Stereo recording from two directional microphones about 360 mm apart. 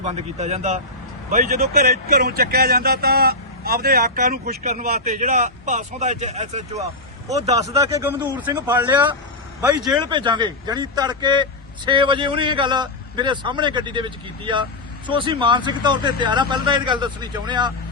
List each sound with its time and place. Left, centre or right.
0.0 s a man's voice: centre